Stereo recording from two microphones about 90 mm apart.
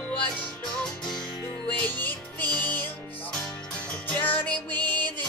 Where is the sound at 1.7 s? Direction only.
20° left (ahead or behind).